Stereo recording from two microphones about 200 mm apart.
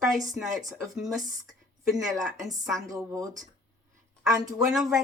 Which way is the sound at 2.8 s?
15° right (ahead or behind).